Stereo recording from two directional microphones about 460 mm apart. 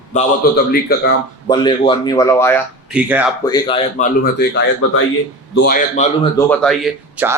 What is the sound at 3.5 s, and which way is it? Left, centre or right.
Speech, centre.